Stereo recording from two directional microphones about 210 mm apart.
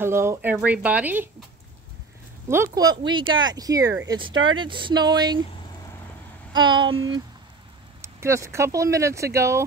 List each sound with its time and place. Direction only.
0.0 s speech: 10° right (ahead or behind)
2.5 s speech: 15° right (ahead or behind)
4.3 s speech: 70° right (ahead or behind)
4.6 s speech: 25° right (ahead or behind)
6.5 s speech: 20° right (ahead or behind)
8.0 s speech: 15° right (ahead or behind)